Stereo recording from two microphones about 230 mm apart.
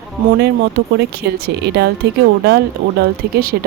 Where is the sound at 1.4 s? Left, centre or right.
Right.